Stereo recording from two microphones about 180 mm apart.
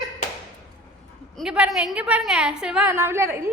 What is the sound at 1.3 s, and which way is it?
A woman's voice, 5° right (ahead or behind).